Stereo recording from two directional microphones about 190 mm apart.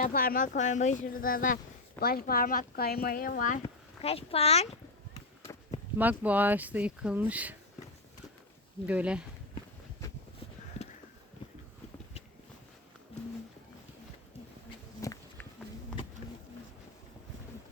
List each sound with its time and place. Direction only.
0.0 s speech: 50° left (ahead or behind)
4.0 s speech: 30° left (ahead or behind)
6.0 s speech: 10° right (ahead or behind)
8.9 s speech: 5° right (ahead or behind)
15.0 s a sound: 15° left (ahead or behind)